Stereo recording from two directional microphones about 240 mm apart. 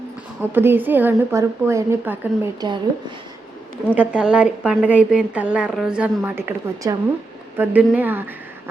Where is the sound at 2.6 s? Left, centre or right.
Centre.